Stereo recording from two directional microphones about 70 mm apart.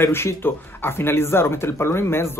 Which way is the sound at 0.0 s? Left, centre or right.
Left.